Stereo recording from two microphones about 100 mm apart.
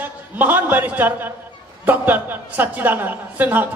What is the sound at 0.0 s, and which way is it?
A man's voice, 20° right (ahead or behind).